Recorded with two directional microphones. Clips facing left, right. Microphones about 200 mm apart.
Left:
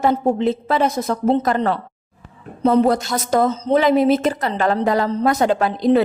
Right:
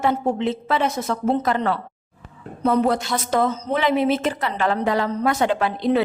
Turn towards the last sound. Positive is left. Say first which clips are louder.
# left 4 dB
turn(degrees=40)  # may be behind; listen again after turning